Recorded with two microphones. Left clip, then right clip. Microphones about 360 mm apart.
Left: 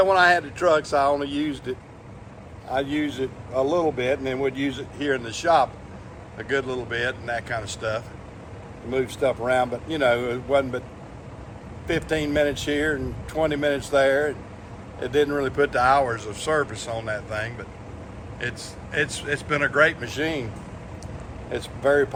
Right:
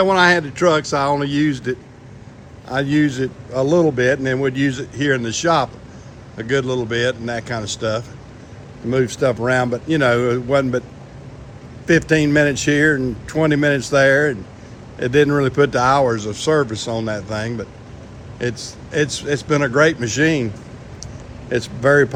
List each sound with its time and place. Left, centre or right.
0.0 s a man's voice: right
2.7 s a man's voice: right
11.9 s a man's voice: right